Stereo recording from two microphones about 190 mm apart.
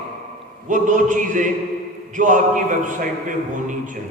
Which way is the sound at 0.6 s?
40° right (ahead or behind).